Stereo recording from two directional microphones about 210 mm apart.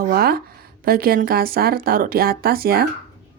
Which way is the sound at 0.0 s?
45° right (ahead or behind).